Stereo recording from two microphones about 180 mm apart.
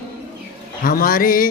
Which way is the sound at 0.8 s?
50° left (ahead or behind).